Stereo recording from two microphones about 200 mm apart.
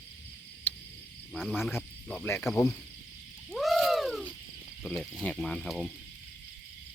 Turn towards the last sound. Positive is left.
turn(degrees=0)  # may be behind; listen again after turning